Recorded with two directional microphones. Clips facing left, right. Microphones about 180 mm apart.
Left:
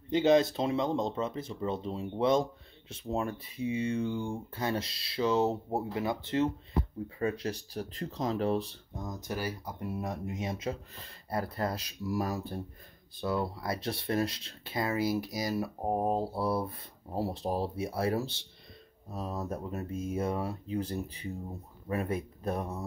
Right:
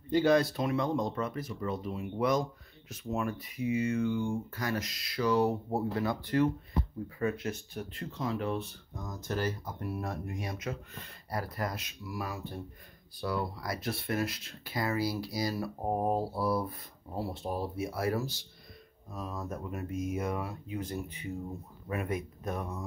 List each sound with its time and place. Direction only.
0.1 s speech: 20° left (ahead or behind)
9.3 s speech: 10° left (ahead or behind); by 12.6 s 35° left (ahead or behind)
13.2 s speech: 25° left (ahead or behind)